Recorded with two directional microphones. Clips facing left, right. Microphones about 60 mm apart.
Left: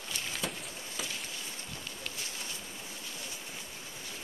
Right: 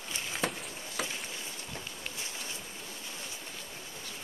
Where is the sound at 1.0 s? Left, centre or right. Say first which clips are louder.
Right 4 dB; right.